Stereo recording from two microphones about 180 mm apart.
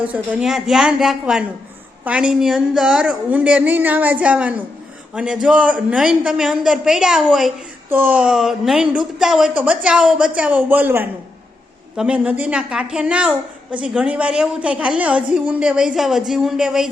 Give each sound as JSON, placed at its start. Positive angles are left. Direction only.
{"t": 0.1, "sound": "a woman's voice", "side_deg": -5}
{"t": 7.9, "sound": "a woman's voice", "side_deg": -10}